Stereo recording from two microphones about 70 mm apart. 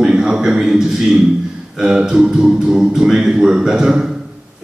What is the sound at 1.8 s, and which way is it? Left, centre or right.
A man's voice, centre.